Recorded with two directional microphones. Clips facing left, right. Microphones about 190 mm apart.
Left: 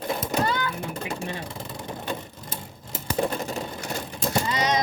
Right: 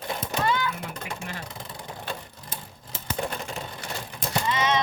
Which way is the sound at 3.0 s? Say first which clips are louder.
Left 5 dB; 45° left (ahead or behind).